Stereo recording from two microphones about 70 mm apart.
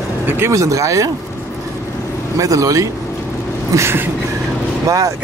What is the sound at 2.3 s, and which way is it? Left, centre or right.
Speech, right.